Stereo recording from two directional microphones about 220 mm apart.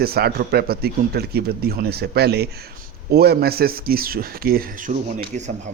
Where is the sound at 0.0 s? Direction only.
45° right (ahead or behind).